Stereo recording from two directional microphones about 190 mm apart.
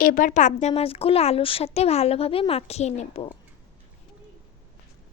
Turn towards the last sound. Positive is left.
turn(degrees=35)  # may be behind; listen again after turning